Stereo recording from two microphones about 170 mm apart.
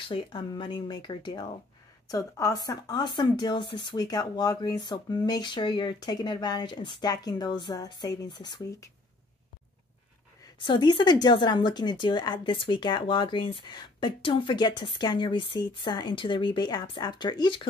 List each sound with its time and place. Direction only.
0.1 s speech: 30° left (ahead or behind)
10.4 s speech: 25° left (ahead or behind)